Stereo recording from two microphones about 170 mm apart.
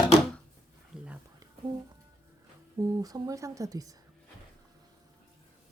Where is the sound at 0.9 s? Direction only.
5° right (ahead or behind).